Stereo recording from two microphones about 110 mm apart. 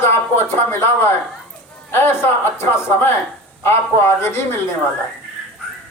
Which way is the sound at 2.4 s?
20° left (ahead or behind).